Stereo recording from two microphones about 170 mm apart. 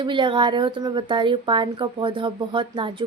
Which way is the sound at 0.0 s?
30° right (ahead or behind).